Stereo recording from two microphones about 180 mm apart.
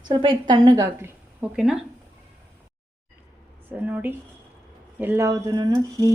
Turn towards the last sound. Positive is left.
turn(degrees=-20)  # may be behind; listen again after turning